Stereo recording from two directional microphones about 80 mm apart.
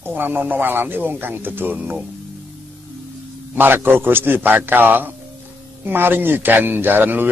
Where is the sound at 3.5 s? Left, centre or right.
Right.